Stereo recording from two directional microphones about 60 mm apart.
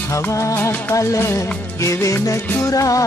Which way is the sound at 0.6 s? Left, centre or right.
Left.